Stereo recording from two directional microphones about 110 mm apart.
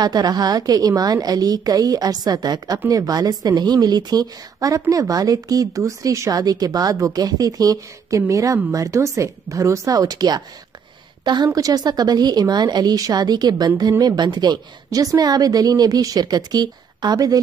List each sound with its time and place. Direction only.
0.0 s a woman's voice: 40° right (ahead or behind)